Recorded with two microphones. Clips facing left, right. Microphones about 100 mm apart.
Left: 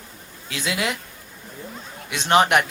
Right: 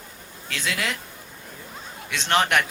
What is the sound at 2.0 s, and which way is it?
Speech, 15° left (ahead or behind).